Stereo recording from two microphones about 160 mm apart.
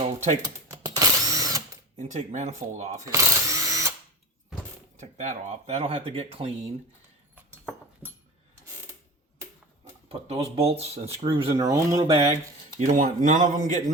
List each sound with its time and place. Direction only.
0.7 s drill: 25° right (ahead or behind)
2.0 s speech: 50° right (ahead or behind)
3.1 s drill: 20° right (ahead or behind)
4.9 s speech: 45° right (ahead or behind)
10.1 s speech: 40° right (ahead or behind)
11.6 s speech: 20° right (ahead or behind)
12.8 s speech: 55° right (ahead or behind)